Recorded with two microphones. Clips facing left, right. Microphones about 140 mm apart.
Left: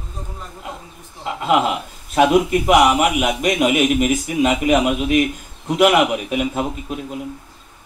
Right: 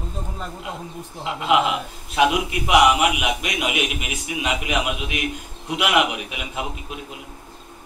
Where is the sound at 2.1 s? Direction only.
45° left (ahead or behind).